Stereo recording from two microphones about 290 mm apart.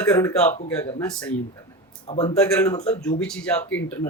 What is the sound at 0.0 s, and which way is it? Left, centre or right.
Speech, centre.